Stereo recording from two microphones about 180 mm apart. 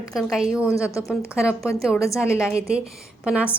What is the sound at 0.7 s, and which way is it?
Speech, 15° left (ahead or behind).